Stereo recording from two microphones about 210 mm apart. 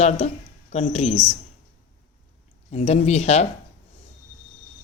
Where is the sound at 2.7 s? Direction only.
30° left (ahead or behind).